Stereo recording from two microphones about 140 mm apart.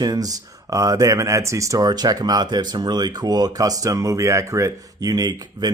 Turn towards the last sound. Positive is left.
turn(degrees=-30)  # may be behind; listen again after turning